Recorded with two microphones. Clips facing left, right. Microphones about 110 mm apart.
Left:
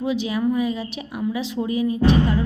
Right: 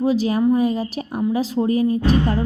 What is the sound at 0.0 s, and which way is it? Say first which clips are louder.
A woman's voice: right 4 dB; 40° right (ahead or behind).